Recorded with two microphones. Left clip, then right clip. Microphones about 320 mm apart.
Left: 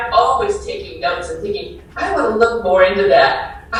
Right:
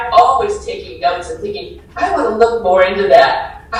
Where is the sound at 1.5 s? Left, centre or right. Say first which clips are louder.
Left 1 dB; centre.